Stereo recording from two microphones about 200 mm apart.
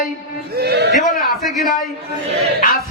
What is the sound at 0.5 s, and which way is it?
Speech, 55° right (ahead or behind).